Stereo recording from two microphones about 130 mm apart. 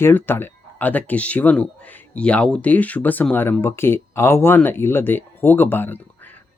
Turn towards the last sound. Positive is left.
turn(degrees=15)  # may be behind; listen again after turning